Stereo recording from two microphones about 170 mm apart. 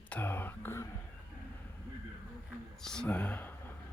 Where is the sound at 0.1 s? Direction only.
10° left (ahead or behind).